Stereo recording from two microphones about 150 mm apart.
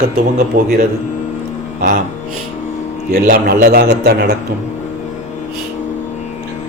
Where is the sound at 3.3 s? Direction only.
85° right.